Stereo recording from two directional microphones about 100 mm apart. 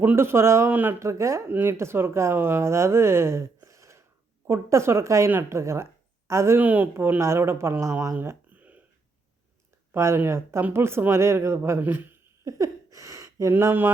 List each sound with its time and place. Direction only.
0.0 s speech: 20° right (ahead or behind)
8.1 s a sound: 20° right (ahead or behind)
9.9 s speech: 25° right (ahead or behind)
12.5 s speech: 35° right (ahead or behind)